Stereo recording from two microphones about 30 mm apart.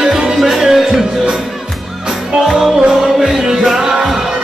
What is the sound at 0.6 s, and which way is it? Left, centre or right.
Music, centre.